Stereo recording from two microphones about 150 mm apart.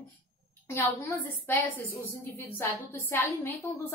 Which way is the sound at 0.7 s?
15° left (ahead or behind).